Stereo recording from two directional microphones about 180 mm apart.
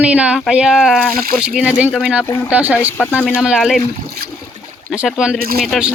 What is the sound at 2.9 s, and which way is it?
Speech, 10° left (ahead or behind).